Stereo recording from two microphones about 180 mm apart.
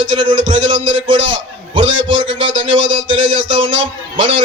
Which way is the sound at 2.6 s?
90° right.